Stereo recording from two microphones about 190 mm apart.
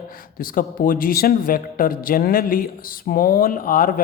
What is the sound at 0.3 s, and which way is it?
A man's voice, 50° left (ahead or behind).